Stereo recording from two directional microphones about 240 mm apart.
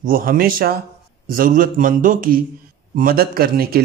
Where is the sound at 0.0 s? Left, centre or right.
Right.